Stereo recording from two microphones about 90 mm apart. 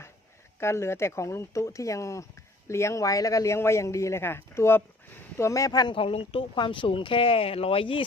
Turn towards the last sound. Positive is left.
turn(degrees=80)